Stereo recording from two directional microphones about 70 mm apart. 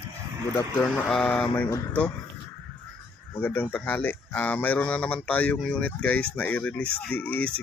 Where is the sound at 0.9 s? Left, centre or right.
Centre.